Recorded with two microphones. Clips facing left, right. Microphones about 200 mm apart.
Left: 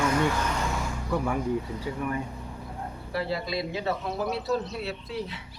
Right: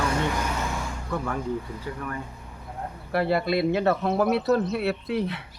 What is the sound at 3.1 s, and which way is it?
Speech, 60° right (ahead or behind).